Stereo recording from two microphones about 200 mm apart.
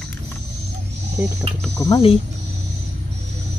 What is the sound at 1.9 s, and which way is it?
Speech, 25° left (ahead or behind).